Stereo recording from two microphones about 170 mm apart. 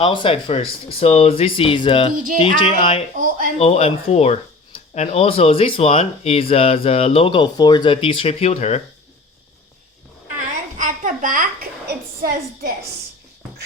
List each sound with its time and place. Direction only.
0.0 s speech: 30° left (ahead or behind)
3.2 s speech: 55° right (ahead or behind)
3.6 s speech: 35° left (ahead or behind)
10.8 s a sound: 50° right (ahead or behind); by 12.7 s 65° right (ahead or behind)